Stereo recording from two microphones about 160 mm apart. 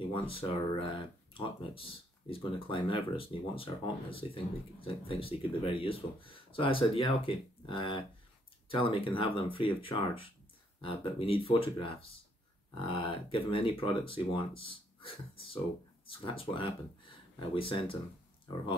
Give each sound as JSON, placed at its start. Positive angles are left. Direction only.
{"t": 0.1, "sound": "speech", "side_deg": 35}